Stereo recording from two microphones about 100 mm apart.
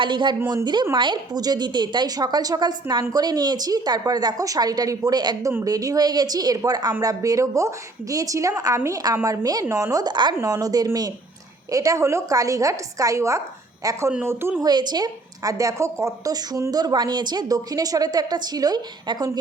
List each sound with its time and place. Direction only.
0.0 s a woman's voice: 50° right (ahead or behind)
10.4 s a woman's voice: 35° right (ahead or behind)